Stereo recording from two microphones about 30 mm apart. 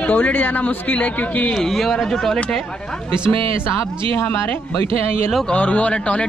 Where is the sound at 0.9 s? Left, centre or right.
Left.